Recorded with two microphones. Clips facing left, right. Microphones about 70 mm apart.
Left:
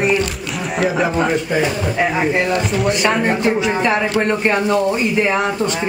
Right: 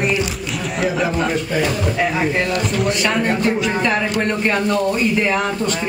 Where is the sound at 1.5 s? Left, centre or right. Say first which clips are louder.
Left 1 dB; centre.